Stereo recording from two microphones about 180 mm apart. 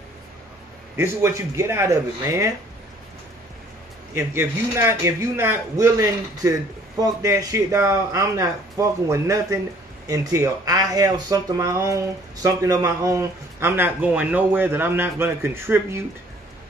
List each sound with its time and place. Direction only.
0.9 s speech: 15° right (ahead or behind)
4.1 s speech: 15° right (ahead or behind)